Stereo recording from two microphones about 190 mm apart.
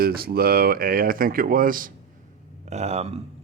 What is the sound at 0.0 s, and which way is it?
Speech, 55° right (ahead or behind).